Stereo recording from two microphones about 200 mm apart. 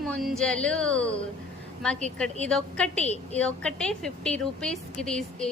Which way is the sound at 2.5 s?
5° left (ahead or behind).